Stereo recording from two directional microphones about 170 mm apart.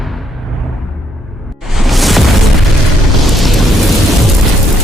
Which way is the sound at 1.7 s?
Centre (ahead or behind).